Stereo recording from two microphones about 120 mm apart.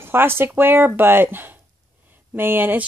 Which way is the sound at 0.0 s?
20° right (ahead or behind).